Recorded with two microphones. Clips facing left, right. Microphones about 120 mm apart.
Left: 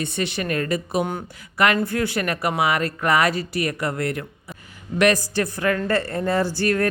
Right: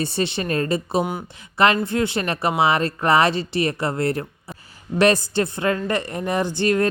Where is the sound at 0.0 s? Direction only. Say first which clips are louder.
Right 2 dB; 30° right (ahead or behind).